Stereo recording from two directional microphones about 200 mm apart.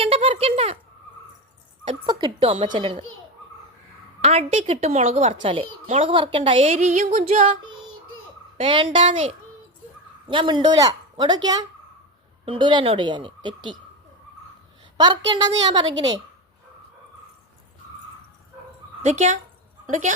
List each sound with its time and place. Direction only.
0.0 s a sound: 30° right (ahead or behind)
1.8 s a woman's voice: 25° right (ahead or behind)
4.2 s a woman's voice: 30° right (ahead or behind)
10.2 s speech: 25° right (ahead or behind)
12.5 s a woman's voice: 20° right (ahead or behind)
14.9 s a woman's voice: 20° right (ahead or behind)
19.0 s speech: 35° right (ahead or behind)